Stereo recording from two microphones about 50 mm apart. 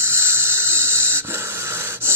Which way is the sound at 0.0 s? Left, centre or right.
Right.